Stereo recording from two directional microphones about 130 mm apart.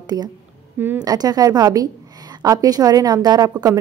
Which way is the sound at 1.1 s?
30° right (ahead or behind).